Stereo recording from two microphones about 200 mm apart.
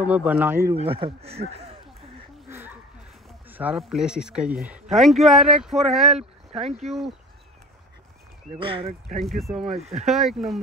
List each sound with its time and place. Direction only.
0.0 s speech: 5° right (ahead or behind)
0.8 s speech: 30° right (ahead or behind)
2.5 s a sound: 10° right (ahead or behind)
3.3 s speech: 10° right (ahead or behind)
6.1 s speech: 30° right (ahead or behind)
6.8 s speech: centre (ahead or behind)
8.5 s speech: 25° right (ahead or behind)
9.4 s speech: centre (ahead or behind)
9.8 s speech: 30° right (ahead or behind)
10.0 s speech: centre (ahead or behind)